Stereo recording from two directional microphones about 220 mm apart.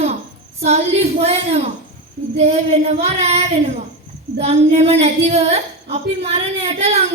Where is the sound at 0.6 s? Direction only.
30° right (ahead or behind).